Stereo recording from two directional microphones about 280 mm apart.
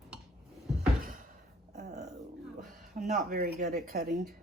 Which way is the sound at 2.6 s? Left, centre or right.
Right.